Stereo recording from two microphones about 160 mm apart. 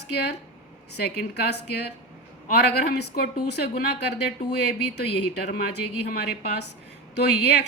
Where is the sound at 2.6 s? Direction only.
90° left.